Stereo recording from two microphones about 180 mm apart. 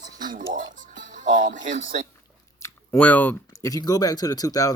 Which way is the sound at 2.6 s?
10° left (ahead or behind).